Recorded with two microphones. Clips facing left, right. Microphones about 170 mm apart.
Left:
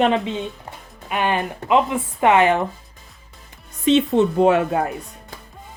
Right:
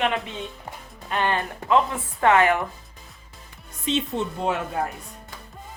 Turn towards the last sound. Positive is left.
turn(degrees=70)  # may be behind; listen again after turning